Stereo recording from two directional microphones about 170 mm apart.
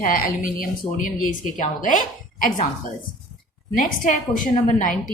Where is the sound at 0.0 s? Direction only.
50° left (ahead or behind).